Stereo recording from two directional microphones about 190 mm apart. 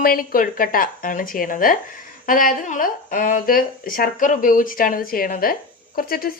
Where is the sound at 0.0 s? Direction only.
50° left (ahead or behind).